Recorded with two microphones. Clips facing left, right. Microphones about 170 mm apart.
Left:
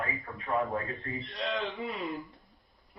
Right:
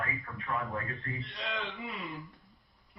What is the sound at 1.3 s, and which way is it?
Speech, 40° left (ahead or behind).